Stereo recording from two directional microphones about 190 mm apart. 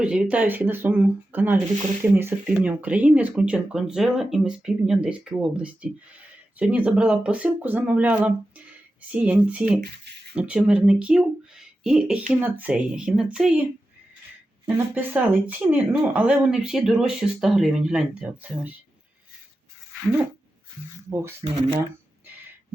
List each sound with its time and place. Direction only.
0.0 s speech: 5° right (ahead or behind)
9.8 s speech: 60° right (ahead or behind)
10.3 s speech: 5° right (ahead or behind)
14.9 s speech: 10° right (ahead or behind)
21.1 s speech: 15° right (ahead or behind)